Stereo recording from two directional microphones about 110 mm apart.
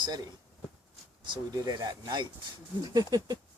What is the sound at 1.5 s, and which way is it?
Speech, 40° right (ahead or behind).